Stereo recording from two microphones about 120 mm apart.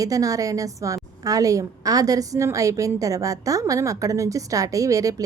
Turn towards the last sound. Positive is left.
turn(degrees=-30)  # may be behind; listen again after turning